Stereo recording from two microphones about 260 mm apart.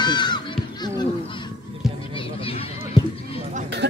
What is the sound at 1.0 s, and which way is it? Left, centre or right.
Honk, centre.